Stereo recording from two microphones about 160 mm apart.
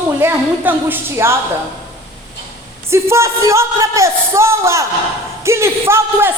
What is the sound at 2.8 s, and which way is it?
Speech, 15° right (ahead or behind).